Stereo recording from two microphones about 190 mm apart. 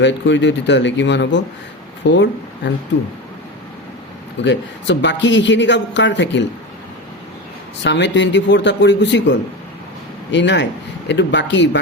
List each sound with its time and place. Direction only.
0.0 s speech: 70° left (ahead or behind)
4.4 s speech: 70° left (ahead or behind)
7.8 s speech: 70° left (ahead or behind)